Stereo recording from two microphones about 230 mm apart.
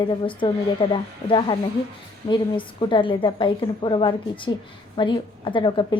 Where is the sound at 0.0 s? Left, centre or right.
Left.